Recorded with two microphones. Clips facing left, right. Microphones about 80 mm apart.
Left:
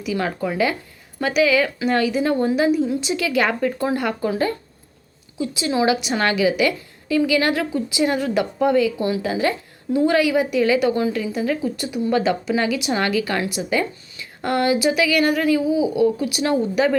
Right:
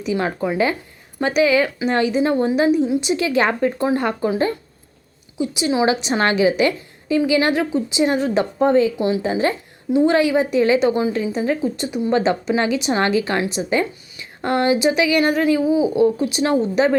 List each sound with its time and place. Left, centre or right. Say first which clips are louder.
0.0 s a woman's voice: right 2 dB; right